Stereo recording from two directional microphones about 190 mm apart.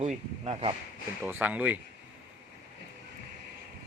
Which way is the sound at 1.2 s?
10° right (ahead or behind).